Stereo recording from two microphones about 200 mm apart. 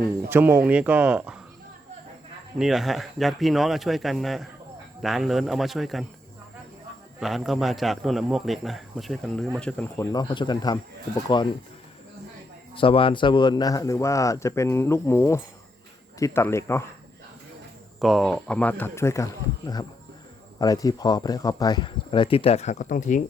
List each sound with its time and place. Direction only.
0.3 s speech: 10° right (ahead or behind)
2.6 s speech: centre (ahead or behind)
7.2 s speech: centre (ahead or behind)
10.1 s speech: 20° left (ahead or behind)
12.7 s speech: 25° left (ahead or behind)
18.0 s speech: centre (ahead or behind); by 23.2 s 40° left (ahead or behind)